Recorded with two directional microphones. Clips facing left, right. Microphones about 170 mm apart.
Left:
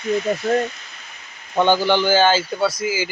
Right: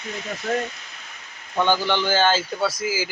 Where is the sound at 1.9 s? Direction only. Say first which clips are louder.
Left 4 dB; 5° left (ahead or behind).